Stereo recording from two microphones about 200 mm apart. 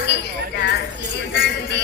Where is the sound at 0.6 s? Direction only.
55° left (ahead or behind).